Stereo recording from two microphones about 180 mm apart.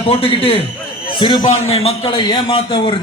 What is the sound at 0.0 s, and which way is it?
A man's voice, 30° left (ahead or behind).